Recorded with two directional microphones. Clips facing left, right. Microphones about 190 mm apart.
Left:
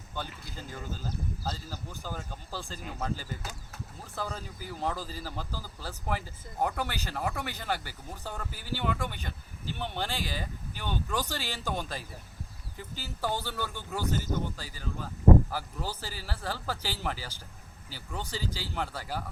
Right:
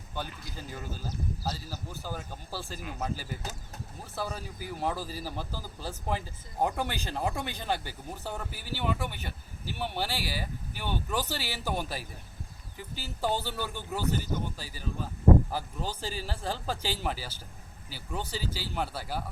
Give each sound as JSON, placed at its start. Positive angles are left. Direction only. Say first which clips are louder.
{"t": 0.1, "sound": "speech", "louder": "right 1 dB", "side_deg": -15}
{"t": 18.3, "sound": "speech", "louder": "left 1 dB", "side_deg": -15}